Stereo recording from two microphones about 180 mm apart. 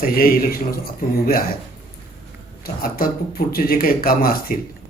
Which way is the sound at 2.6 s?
55° left (ahead or behind).